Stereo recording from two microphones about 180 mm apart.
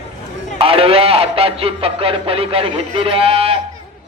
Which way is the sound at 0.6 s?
30° right (ahead or behind).